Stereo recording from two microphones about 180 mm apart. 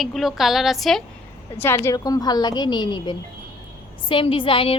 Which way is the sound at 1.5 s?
15° left (ahead or behind).